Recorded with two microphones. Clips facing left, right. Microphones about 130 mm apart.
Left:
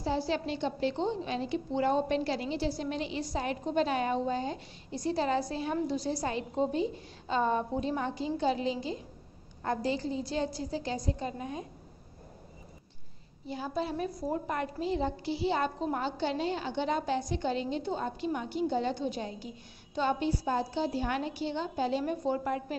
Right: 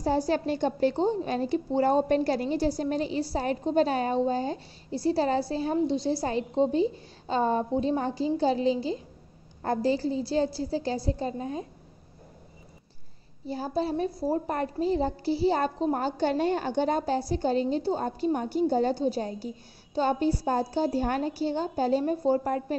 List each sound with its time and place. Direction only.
0.3 s a woman's voice: 45° right (ahead or behind)
13.5 s a woman's voice: 35° right (ahead or behind)